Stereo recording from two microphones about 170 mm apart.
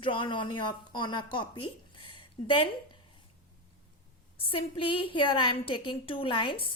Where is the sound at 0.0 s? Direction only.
30° left (ahead or behind).